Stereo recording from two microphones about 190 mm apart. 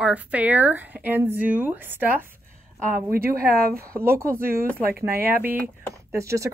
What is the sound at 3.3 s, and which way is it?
Speech, 50° right (ahead or behind).